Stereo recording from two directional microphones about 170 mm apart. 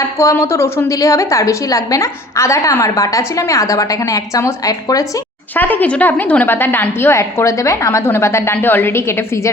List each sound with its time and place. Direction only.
0.2 s a woman's voice: 15° left (ahead or behind)